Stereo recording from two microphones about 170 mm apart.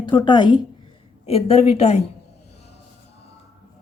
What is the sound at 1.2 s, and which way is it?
Speech, 35° left (ahead or behind).